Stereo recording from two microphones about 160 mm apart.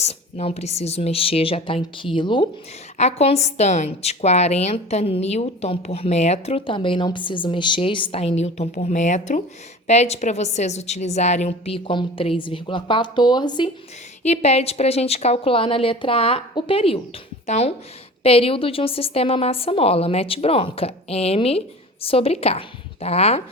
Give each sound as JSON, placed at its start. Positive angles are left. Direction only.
{"t": 0.0, "sound": "a woman's voice", "side_deg": 40}
{"t": 3.0, "sound": "a woman's voice", "side_deg": 40}
{"t": 14.3, "sound": "a woman's voice", "side_deg": 40}